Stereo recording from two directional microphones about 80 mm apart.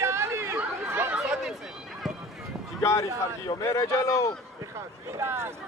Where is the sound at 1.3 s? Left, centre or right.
Centre.